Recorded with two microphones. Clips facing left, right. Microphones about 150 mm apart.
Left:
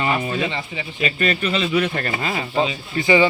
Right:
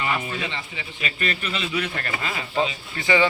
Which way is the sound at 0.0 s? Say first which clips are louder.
Left 5 dB; 35° left (ahead or behind).